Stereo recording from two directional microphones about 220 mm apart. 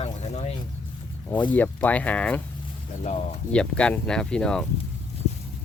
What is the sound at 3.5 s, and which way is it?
Speech, 5° left (ahead or behind).